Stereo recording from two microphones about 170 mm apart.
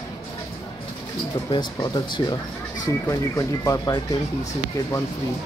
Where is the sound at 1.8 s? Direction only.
25° left (ahead or behind).